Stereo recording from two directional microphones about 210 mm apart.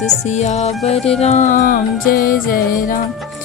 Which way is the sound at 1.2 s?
35° left (ahead or behind).